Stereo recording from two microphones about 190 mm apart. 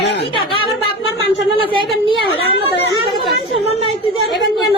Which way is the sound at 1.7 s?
25° right (ahead or behind).